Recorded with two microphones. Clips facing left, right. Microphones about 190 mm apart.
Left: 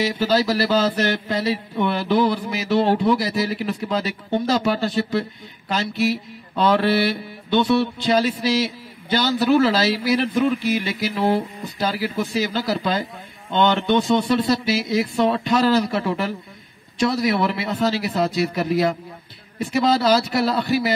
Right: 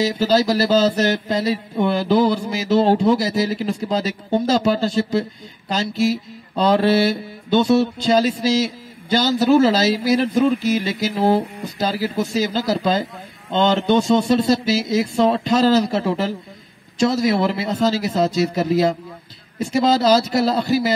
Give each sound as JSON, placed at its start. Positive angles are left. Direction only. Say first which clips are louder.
{"t": 0.4, "sound": "music", "louder": "right 3 dB", "side_deg": -45}
{"t": 13.5, "sound": "speech", "louder": "right 2 dB", "side_deg": -35}